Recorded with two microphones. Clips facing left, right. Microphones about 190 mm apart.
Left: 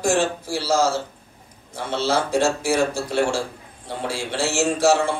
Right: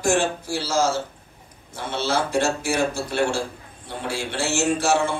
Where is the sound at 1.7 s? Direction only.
55° right (ahead or behind).